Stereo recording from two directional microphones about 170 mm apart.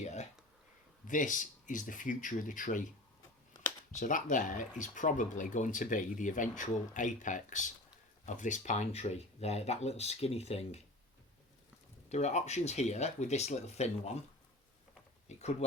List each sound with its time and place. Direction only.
0.0 s a sound: 40° left (ahead or behind)
1.0 s speech: 50° left (ahead or behind)
3.9 s speech: 50° left (ahead or behind)
12.0 s speech: 40° left (ahead or behind)
15.3 s speech: 40° left (ahead or behind)